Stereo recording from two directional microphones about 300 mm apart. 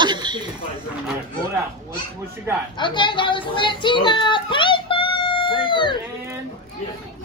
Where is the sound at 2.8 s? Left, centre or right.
Centre.